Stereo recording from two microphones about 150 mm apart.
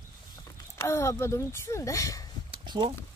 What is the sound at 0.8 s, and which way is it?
Speech, 20° left (ahead or behind).